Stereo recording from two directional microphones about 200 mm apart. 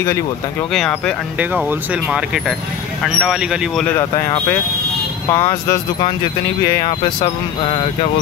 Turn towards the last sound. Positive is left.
turn(degrees=25)  # may be behind; listen again after turning